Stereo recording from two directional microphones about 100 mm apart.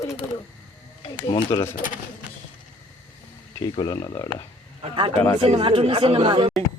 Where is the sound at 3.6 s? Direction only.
45° left (ahead or behind).